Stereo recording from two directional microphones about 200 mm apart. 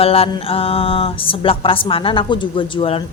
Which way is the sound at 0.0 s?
30° left (ahead or behind).